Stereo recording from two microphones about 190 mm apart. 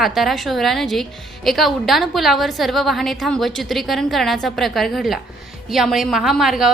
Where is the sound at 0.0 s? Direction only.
Centre (ahead or behind).